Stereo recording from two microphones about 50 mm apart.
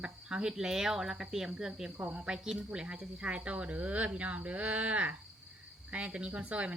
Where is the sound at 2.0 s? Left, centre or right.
Right.